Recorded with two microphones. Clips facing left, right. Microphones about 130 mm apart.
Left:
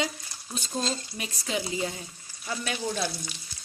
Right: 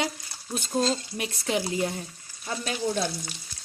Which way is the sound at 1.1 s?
65° right (ahead or behind).